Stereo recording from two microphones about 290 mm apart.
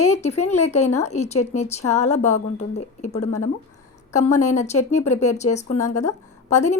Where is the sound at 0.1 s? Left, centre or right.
Left.